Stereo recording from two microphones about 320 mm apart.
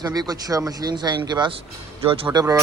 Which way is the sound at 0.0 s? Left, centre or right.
Centre.